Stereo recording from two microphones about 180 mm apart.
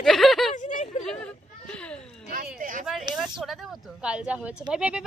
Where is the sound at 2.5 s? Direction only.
45° right (ahead or behind).